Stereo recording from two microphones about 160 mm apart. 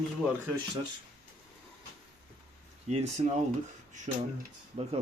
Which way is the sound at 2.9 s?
40° right (ahead or behind).